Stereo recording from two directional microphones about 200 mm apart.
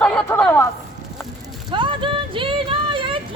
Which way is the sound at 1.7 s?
25° right (ahead or behind).